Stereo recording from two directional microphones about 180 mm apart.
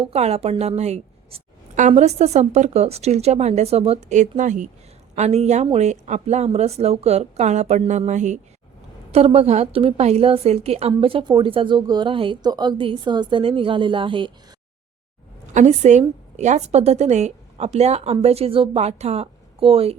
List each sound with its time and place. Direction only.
0.0 s a woman's voice: 35° right (ahead or behind)
15.5 s a woman's voice: 40° right (ahead or behind)